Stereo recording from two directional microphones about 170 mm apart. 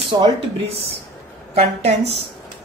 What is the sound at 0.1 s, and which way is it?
Speech, 30° right (ahead or behind).